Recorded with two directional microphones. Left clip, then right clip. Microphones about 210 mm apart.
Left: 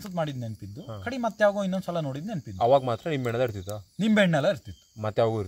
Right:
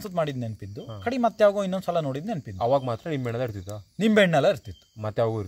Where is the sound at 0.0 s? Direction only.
45° right (ahead or behind).